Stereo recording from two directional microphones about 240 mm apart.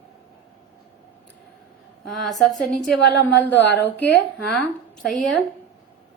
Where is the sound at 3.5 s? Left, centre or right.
Left.